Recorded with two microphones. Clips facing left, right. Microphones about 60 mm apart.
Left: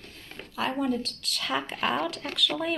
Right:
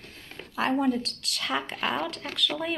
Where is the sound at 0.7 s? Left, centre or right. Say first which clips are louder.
Right 3 dB; right.